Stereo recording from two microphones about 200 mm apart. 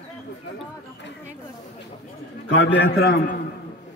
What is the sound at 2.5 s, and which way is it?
Speech, 65° left (ahead or behind).